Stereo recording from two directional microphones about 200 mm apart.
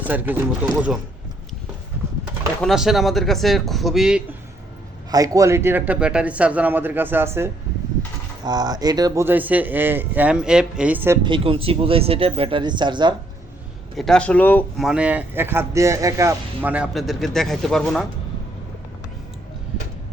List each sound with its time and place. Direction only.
0.0 s speech: 10° right (ahead or behind)
2.6 s speech: centre (ahead or behind)
5.1 s speech: 15° right (ahead or behind)
11.2 s speech: 25° right (ahead or behind)
13.9 s speech: centre (ahead or behind)
14.8 s speech: 5° right (ahead or behind)